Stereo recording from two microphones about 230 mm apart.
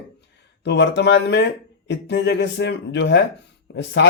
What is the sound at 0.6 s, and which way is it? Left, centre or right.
Speech, left.